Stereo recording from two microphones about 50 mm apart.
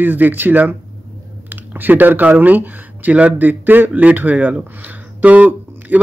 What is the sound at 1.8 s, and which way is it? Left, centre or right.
Speech, right.